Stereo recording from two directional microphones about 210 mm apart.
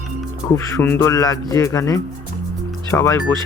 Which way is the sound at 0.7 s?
10° left (ahead or behind).